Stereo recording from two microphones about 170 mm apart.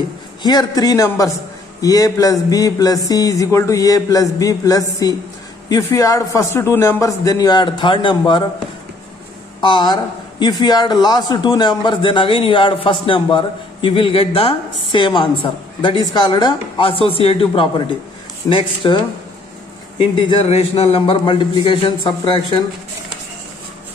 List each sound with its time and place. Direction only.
0.4 s a man's voice: 25° left (ahead or behind)
9.6 s a man's voice: 30° left (ahead or behind)